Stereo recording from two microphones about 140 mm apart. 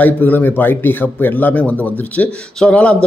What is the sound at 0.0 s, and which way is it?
Speech, 15° left (ahead or behind).